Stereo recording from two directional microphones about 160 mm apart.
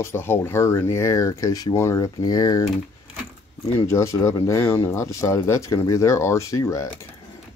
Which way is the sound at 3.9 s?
20° left (ahead or behind).